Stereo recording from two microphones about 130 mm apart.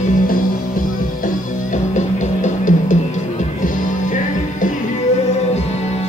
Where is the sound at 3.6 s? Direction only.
90° left.